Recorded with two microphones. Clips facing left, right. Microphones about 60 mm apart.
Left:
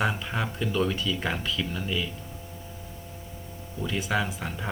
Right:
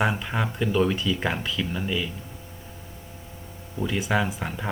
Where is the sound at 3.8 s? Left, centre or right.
Centre.